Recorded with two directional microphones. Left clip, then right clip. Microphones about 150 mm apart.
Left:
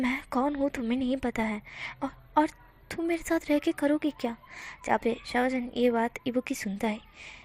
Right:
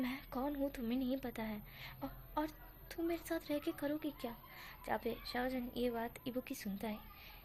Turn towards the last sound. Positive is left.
turn(degrees=35)  # may be behind; listen again after turning